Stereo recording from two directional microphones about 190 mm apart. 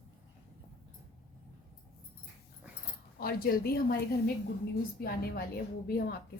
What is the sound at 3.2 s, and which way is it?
Speech, 50° left (ahead or behind).